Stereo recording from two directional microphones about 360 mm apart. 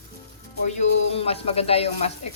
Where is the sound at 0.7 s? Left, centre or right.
Centre.